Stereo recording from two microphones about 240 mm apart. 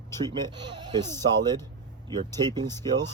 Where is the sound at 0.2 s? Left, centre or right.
Centre.